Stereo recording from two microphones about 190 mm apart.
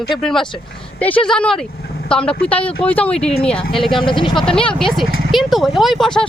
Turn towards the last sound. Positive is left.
turn(degrees=0)  # may be behind; listen again after turning